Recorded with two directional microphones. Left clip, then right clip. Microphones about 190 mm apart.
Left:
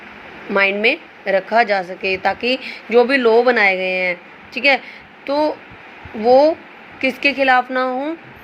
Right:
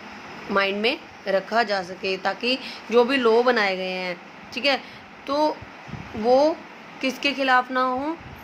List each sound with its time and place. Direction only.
0.5 s a woman's voice: 15° left (ahead or behind)